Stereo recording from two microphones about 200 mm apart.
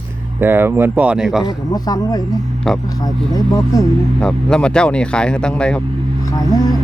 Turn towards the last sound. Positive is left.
turn(degrees=20)  # may be behind; listen again after turning